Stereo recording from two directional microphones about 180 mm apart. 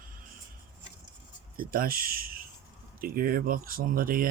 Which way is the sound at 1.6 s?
55° right (ahead or behind).